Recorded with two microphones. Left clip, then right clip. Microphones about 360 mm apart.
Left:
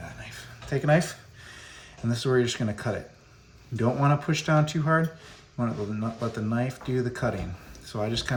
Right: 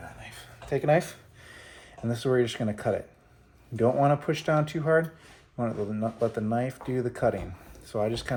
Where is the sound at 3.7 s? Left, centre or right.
Centre.